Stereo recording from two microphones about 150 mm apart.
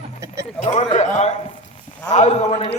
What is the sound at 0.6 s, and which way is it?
A man's voice, 50° left (ahead or behind).